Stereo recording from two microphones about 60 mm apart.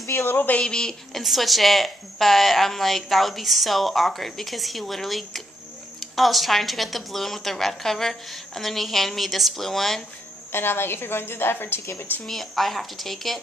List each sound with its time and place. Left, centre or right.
0.0 s speech: left
0.3 s a woman's voice: left
0.6 s speech: centre
1.2 s a woman's voice: centre
10.5 s a woman's voice: left
12.3 s a woman's voice: centre